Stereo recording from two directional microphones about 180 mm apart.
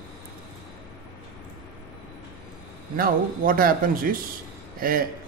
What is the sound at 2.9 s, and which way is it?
Speech, 55° right (ahead or behind).